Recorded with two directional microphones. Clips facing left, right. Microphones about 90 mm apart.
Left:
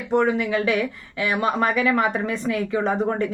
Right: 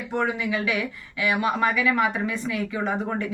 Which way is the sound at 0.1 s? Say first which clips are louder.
Left 6 dB; 40° left (ahead or behind).